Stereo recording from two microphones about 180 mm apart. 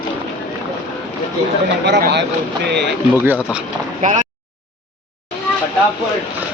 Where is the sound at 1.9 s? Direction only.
70° right (ahead or behind).